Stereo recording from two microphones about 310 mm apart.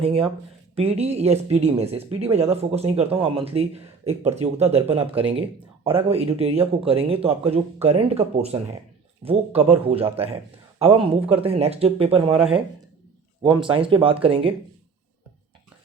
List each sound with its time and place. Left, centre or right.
0.0 s speech: centre
12.4 s speech: centre
13.4 s speech: centre